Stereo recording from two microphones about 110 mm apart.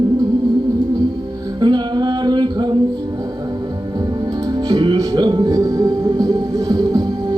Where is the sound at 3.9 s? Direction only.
35° right (ahead or behind).